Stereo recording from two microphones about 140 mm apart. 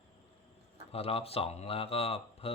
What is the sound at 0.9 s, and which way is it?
Speech, 45° left (ahead or behind).